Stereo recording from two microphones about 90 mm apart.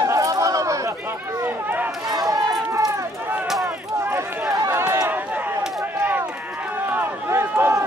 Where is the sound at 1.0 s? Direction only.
25° right (ahead or behind).